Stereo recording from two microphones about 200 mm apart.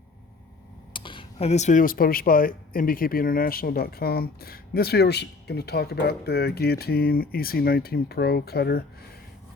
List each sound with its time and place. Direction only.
0.9 s speech: 25° left (ahead or behind); by 8.8 s 55° left (ahead or behind)